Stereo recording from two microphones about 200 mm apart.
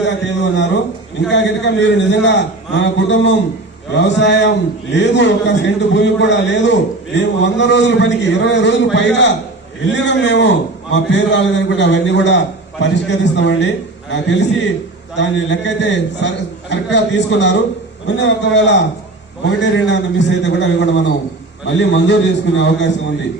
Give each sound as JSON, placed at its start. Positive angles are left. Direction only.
{"t": 0.5, "sound": "a man's voice", "side_deg": 65}